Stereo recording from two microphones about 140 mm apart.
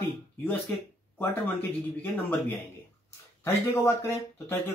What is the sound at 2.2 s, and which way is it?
Speech, 15° left (ahead or behind).